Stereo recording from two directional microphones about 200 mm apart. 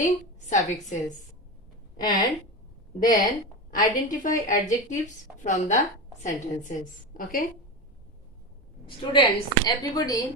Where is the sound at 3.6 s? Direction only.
40° left (ahead or behind).